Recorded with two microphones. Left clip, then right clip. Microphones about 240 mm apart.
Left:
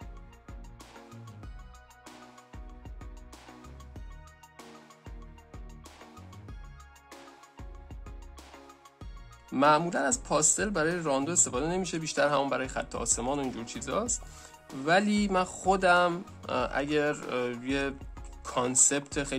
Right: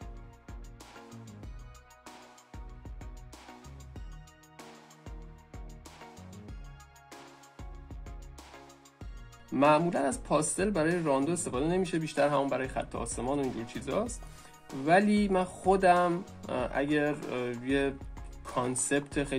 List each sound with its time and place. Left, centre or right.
7.1 s music: centre
9.5 s speech: left